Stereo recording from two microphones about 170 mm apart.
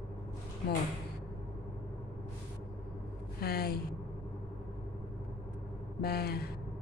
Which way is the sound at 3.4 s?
65° left (ahead or behind).